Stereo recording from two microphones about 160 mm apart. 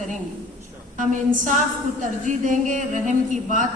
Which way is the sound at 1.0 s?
50° right (ahead or behind).